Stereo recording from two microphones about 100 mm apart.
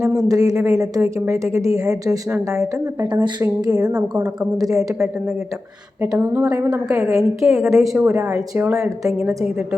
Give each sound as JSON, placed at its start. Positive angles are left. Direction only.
{"t": 0.0, "sound": "a woman's voice", "side_deg": -30}
{"t": 3.1, "sound": "a woman's voice", "side_deg": -45}
{"t": 6.0, "sound": "a woman's voice", "side_deg": -20}
{"t": 6.4, "sound": "a woman's voice", "side_deg": -35}
{"t": 6.9, "sound": "a woman's voice", "side_deg": -20}
{"t": 7.2, "sound": "a woman's voice", "side_deg": -5}
{"t": 8.0, "sound": "a woman's voice", "side_deg": -20}